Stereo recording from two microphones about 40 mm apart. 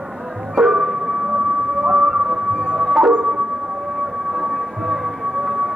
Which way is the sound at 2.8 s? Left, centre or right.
Centre.